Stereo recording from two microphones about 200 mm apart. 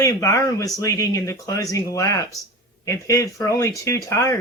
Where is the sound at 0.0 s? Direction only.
15° left (ahead or behind).